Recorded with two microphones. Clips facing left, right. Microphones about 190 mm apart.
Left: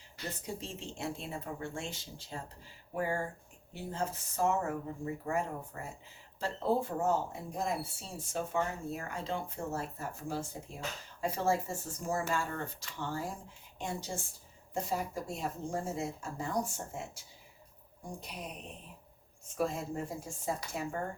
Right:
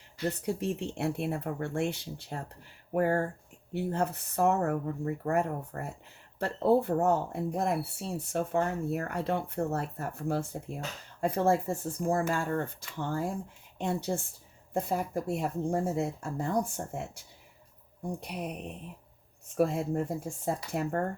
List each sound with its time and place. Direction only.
0.3 s speech: 65° right (ahead or behind)